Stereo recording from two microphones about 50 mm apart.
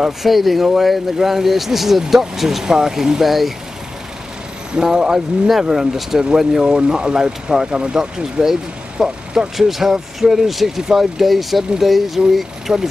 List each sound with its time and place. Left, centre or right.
0.0 s speech: centre
4.7 s speech: centre
12.7 s speech: centre